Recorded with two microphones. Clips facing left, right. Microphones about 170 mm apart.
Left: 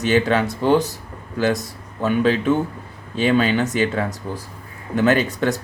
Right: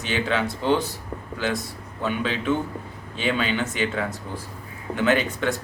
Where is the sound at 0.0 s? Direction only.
45° left (ahead or behind).